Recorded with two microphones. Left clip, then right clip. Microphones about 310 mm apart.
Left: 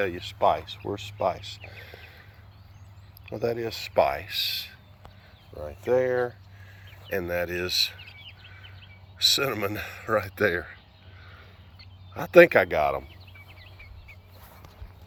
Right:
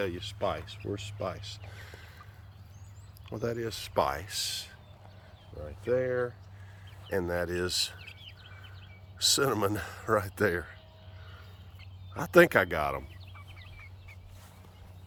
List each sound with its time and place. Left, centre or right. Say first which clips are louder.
0.0 s speech: left 8 dB; centre
3.2 s speech: left 6 dB; centre
7.1 s bird: left 3 dB; centre
9.1 s speech: left 4 dB; centre
11.8 s speech: left 3 dB; centre